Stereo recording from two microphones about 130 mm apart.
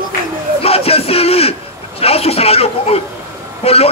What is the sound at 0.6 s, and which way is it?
A man's voice, 50° left (ahead or behind).